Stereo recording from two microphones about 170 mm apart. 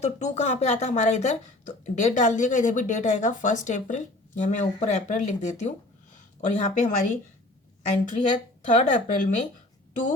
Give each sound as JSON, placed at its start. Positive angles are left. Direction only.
{"t": 0.0, "sound": "speech", "side_deg": 40}